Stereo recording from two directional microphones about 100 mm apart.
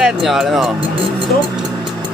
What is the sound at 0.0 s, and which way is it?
Speech, centre (ahead or behind).